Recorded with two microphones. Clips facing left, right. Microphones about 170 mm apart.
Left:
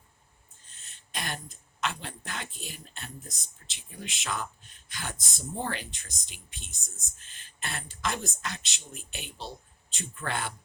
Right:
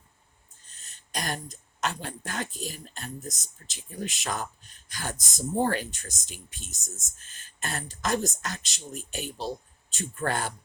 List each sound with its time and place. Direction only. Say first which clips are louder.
0.7 s speech: right 5 dB; 40° right (ahead or behind)